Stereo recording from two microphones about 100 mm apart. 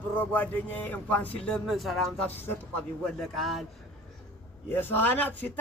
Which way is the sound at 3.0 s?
Centre (ahead or behind).